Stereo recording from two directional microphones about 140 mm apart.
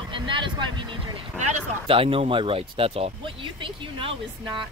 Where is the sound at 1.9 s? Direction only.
40° right (ahead or behind).